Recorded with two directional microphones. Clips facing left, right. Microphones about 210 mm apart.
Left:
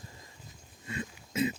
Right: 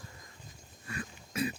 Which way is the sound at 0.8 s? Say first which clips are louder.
Left 3 dB; 20° left (ahead or behind).